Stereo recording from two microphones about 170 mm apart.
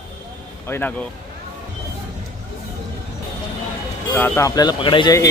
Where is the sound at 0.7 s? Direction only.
10° left (ahead or behind).